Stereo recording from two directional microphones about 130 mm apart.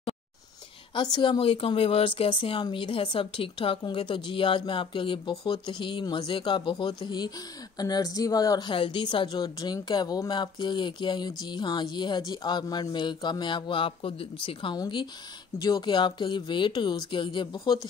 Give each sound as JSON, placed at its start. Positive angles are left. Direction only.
{"t": 0.9, "sound": "speech", "side_deg": 35}